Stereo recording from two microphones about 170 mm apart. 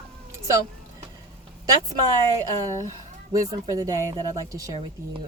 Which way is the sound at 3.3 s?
25° right (ahead or behind).